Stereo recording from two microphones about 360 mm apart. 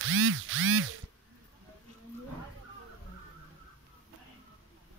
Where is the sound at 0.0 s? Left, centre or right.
Right.